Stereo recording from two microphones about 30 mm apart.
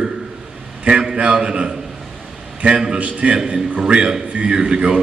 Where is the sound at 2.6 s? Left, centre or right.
Right.